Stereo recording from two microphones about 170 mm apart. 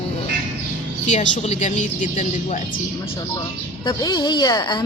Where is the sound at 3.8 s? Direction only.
25° left (ahead or behind).